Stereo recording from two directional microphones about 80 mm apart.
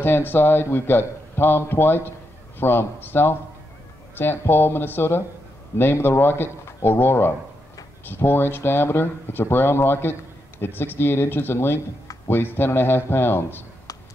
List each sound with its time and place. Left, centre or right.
0.0 s a man's voice: left